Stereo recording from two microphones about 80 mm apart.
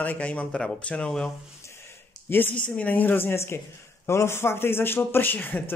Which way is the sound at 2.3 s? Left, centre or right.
Left.